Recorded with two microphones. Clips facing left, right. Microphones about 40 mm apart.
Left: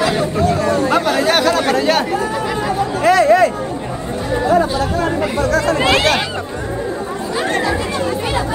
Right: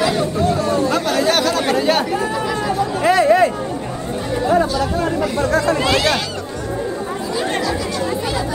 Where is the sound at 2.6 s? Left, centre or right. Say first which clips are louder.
Left 2 dB; left.